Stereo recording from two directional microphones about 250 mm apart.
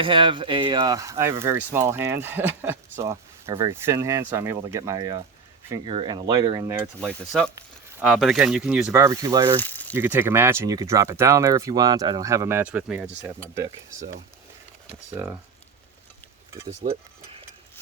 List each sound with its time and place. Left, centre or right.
0.0 s speech: centre
7.0 s speech: centre
9.6 s a sound: centre
9.9 s speech: centre
15.1 s speech: centre
16.6 s stir: right